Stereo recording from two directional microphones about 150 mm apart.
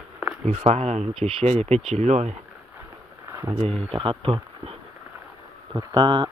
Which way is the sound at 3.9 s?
35° right (ahead or behind).